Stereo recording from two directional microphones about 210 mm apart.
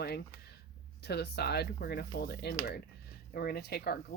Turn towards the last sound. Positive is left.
turn(degrees=50)  # may be behind; listen again after turning